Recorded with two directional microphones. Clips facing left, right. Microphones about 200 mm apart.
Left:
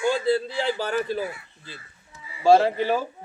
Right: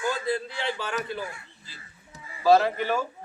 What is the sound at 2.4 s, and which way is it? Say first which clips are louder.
Speech: left 3 dB; 30° left (ahead or behind).